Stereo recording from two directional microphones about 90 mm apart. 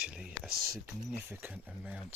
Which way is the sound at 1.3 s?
25° right (ahead or behind).